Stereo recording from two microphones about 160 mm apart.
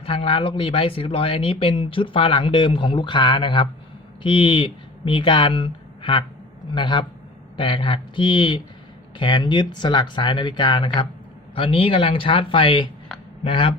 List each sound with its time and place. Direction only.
0.0 s speech: 35° left (ahead or behind)